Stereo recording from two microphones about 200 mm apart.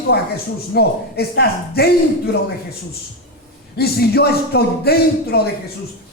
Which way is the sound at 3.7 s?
50° left (ahead or behind).